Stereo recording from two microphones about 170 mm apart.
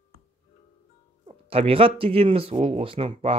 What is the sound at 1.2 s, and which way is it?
Speech, 35° right (ahead or behind).